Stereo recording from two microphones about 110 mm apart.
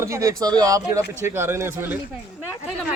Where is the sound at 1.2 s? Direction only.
20° right (ahead or behind).